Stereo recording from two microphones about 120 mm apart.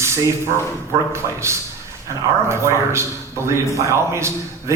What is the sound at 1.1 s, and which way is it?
A man's voice, 25° right (ahead or behind).